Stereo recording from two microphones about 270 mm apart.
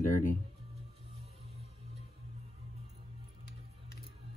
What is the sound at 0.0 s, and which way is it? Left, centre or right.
Music, left.